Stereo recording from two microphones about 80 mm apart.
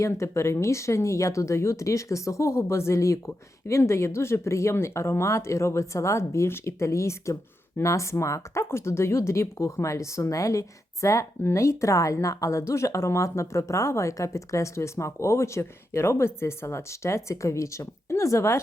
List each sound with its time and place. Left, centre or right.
0.0 s speech: left